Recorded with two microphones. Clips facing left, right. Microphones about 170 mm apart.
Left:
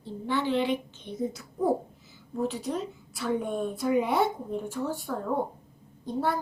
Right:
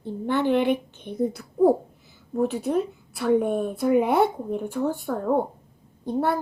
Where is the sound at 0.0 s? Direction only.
55° right (ahead or behind).